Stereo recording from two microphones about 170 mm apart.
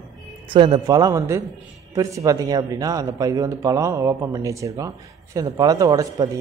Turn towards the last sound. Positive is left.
turn(degrees=-20)  # may be behind; listen again after turning